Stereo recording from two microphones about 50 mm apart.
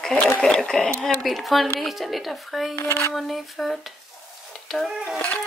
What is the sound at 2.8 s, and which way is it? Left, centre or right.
Speech, left.